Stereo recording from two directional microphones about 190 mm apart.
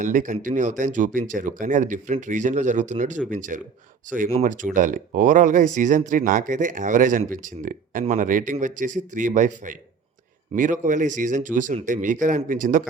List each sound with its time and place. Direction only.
0.0 s speech: 45° right (ahead or behind)